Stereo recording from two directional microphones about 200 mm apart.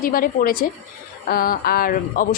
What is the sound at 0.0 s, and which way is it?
A woman's voice, 45° left (ahead or behind).